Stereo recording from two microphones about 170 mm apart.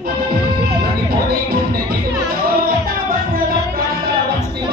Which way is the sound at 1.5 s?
60° right (ahead or behind).